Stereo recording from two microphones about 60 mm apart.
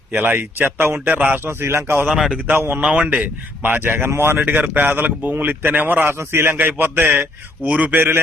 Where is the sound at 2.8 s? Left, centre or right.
Right.